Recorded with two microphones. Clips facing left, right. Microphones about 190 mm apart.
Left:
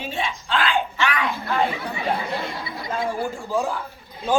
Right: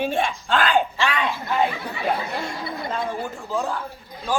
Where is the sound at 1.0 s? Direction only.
25° right (ahead or behind).